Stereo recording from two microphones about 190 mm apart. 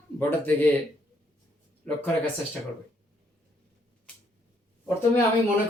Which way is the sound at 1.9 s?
5° left (ahead or behind).